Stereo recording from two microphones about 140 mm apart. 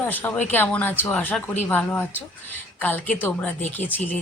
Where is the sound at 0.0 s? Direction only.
10° left (ahead or behind).